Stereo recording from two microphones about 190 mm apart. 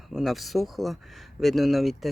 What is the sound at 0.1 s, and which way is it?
Speech, centre (ahead or behind).